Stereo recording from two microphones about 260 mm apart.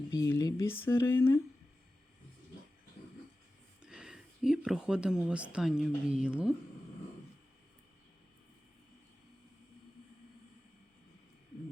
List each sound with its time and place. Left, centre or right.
0.1 s speech: centre
3.8 s speech: centre